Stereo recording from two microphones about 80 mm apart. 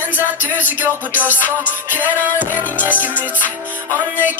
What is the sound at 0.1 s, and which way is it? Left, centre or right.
Music, right.